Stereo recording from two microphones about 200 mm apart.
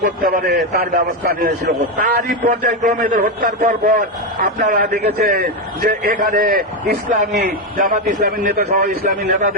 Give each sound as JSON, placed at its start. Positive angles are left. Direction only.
{"t": 0.0, "sound": "a man's voice", "side_deg": -45}